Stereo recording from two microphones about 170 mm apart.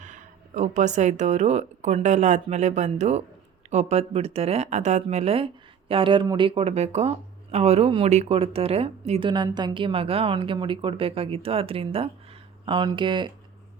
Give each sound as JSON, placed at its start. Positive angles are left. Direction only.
{"t": 0.0, "sound": "speech", "side_deg": -45}